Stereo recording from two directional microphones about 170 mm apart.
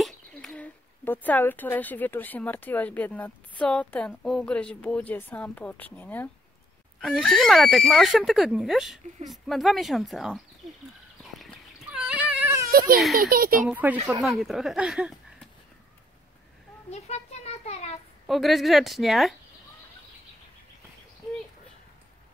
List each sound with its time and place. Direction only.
0.0 s speech: 5° left (ahead or behind)
11.9 s dog: 5° right (ahead or behind)
13.1 s a child's voice: 60° right (ahead or behind)
13.7 s speech: 10° right (ahead or behind)
16.9 s children playing: 40° left (ahead or behind)
18.2 s speech: centre (ahead or behind)